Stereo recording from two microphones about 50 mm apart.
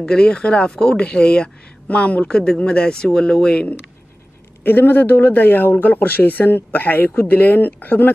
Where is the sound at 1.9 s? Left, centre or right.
Left.